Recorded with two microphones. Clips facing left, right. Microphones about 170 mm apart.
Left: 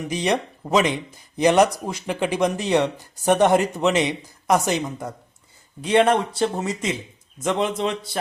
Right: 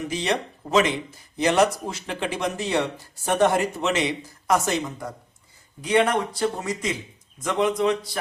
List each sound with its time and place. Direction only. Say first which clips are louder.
0.1 s a man's voice: left 6 dB; 15° left (ahead or behind)